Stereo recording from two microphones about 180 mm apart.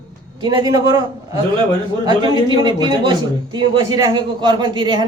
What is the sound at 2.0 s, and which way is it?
A man's voice, 25° right (ahead or behind).